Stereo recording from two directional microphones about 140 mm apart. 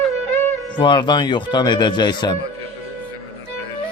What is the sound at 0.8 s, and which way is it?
A man's voice, 35° left (ahead or behind).